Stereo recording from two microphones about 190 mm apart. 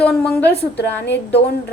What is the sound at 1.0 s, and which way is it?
Speech, 65° left (ahead or behind).